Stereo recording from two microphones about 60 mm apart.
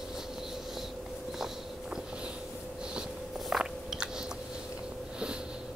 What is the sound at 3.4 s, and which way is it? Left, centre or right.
Biting, centre.